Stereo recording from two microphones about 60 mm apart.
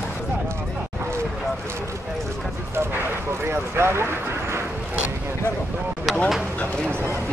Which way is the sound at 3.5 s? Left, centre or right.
Right.